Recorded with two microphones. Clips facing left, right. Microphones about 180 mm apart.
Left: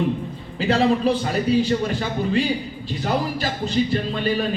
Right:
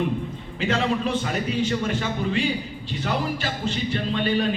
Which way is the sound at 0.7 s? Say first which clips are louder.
Left 5 dB; 35° left (ahead or behind).